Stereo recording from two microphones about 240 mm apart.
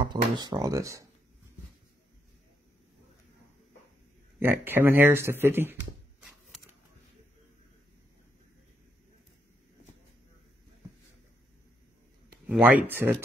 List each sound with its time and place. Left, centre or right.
0.0 s speech: centre
4.4 s speech: centre
12.4 s speech: centre